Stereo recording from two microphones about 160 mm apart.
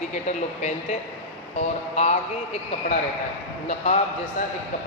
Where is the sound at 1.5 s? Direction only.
45° left (ahead or behind).